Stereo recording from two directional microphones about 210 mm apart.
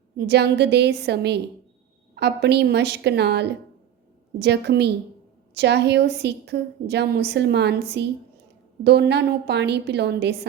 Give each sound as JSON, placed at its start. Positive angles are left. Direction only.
{"t": 0.2, "sound": "a woman's voice", "side_deg": -50}